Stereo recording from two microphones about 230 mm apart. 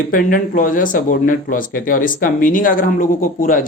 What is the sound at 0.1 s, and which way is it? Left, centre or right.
Speech, left.